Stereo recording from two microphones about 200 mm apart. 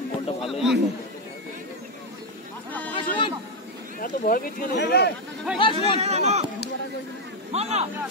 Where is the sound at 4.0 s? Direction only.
45° left (ahead or behind).